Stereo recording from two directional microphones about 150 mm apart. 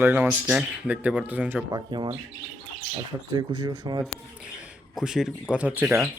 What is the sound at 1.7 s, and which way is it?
Speech, 30° right (ahead or behind).